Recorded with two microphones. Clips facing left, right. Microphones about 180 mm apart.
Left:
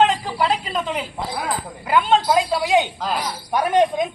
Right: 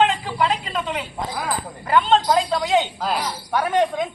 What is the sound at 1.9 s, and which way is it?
A man's voice, 10° left (ahead or behind).